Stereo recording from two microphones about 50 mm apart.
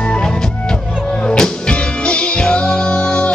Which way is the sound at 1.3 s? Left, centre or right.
Centre.